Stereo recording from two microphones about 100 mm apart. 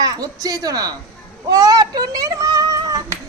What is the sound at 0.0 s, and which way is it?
A child's voice, 40° right (ahead or behind).